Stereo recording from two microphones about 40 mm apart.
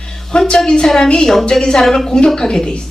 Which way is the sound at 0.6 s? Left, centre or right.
Centre.